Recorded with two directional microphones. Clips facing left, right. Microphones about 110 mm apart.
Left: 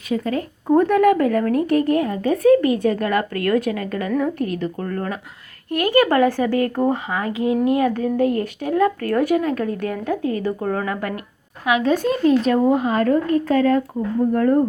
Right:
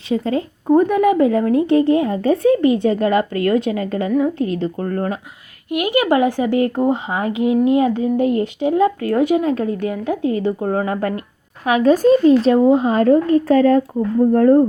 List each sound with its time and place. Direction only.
0.1 s a woman's voice: 25° right (ahead or behind)
4.1 s a woman's voice: 15° right (ahead or behind)
4.4 s a woman's voice: 30° right (ahead or behind)
5.7 s a woman's voice: 15° right (ahead or behind)
11.6 s a woman's voice: 40° right (ahead or behind)
12.2 s a woman's voice: 25° right (ahead or behind)